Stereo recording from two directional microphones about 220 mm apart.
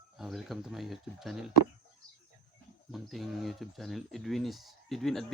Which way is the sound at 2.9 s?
Centre (ahead or behind).